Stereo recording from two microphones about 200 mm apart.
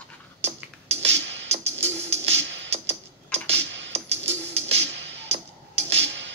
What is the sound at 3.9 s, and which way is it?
Music, 30° right (ahead or behind).